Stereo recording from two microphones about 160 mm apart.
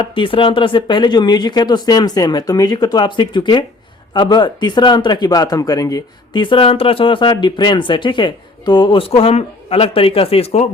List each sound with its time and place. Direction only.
0.0 s speech: 35° left (ahead or behind)